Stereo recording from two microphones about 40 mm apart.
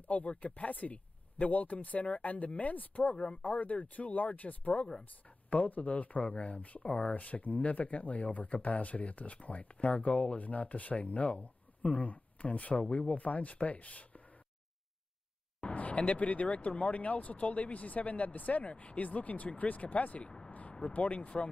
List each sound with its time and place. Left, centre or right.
0.1 s speech: left
15.6 s speech: left
20.2 s vehicle: left
20.9 s speech: left